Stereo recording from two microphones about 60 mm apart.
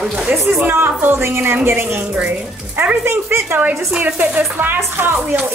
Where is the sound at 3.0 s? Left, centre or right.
Right.